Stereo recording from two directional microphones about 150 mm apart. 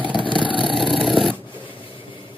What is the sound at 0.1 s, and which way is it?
Vehicle, 30° left (ahead or behind).